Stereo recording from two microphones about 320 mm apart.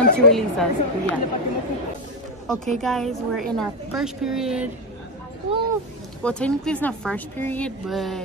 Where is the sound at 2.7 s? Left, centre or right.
Centre.